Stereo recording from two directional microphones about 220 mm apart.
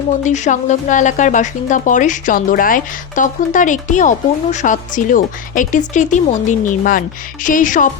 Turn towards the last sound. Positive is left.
turn(degrees=35)  # may be behind; listen again after turning